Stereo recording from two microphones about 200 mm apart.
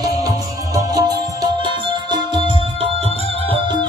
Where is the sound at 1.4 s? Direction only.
20° right (ahead or behind).